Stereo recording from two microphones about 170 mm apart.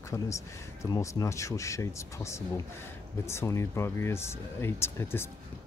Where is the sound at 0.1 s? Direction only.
15° left (ahead or behind).